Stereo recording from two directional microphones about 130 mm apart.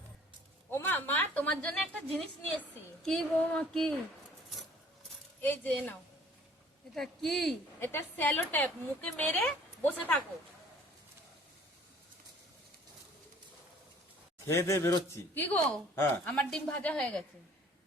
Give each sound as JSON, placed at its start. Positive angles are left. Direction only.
{"t": 0.7, "sound": "a woman's voice", "side_deg": 15}
{"t": 3.1, "sound": "female singing", "side_deg": 5}
{"t": 5.4, "sound": "a woman's voice", "side_deg": 15}
{"t": 6.9, "sound": "female singing", "side_deg": 0}
{"t": 7.8, "sound": "a woman's voice", "side_deg": 15}
{"t": 14.4, "sound": "a woman's voice", "side_deg": 20}